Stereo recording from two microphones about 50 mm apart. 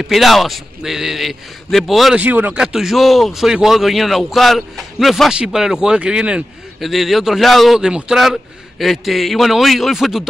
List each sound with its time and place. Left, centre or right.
0.0 s a man's voice: centre
2.1 s speech: right
2.5 s a man's voice: centre
4.9 s a man's voice: centre
6.8 s a man's voice: centre
7.8 s speech: centre
8.2 s a man's voice: centre